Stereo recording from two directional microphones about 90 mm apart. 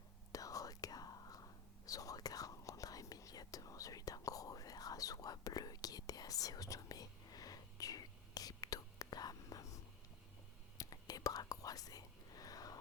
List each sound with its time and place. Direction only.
0.3 s whispering: 40° left (ahead or behind)